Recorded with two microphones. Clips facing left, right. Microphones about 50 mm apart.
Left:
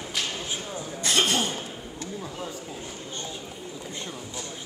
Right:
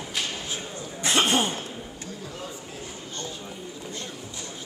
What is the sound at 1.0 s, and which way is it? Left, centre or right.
Throat clearing, right.